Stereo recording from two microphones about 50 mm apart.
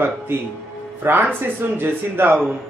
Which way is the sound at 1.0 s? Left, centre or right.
Right.